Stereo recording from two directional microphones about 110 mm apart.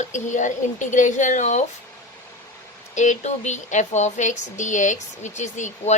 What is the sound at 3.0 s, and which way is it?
Speech, 90° left.